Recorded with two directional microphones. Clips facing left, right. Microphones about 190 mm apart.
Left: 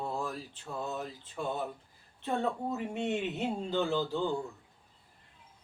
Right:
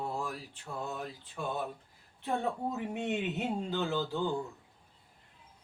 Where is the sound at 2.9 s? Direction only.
15° right (ahead or behind).